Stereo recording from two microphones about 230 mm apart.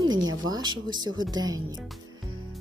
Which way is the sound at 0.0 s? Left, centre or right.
Centre.